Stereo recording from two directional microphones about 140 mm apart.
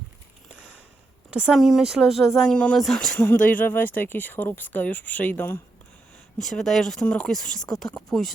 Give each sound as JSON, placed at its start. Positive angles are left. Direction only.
{"t": 1.3, "sound": "speech", "side_deg": -5}